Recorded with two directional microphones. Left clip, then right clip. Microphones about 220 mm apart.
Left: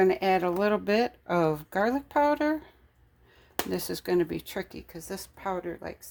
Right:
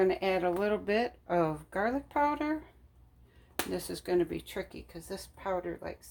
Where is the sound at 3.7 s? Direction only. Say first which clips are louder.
Left 4 dB; 50° left (ahead or behind).